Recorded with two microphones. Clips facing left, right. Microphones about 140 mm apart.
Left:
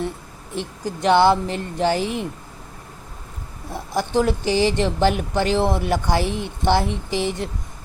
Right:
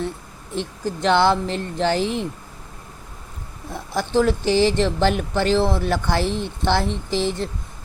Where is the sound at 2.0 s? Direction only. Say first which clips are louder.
Right 1 dB; 55° left (ahead or behind).